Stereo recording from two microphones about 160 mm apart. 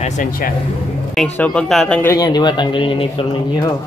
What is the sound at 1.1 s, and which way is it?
Speech, 10° left (ahead or behind).